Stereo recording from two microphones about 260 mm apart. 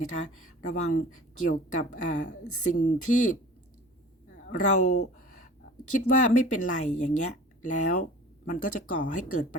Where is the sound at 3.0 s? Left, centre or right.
Left.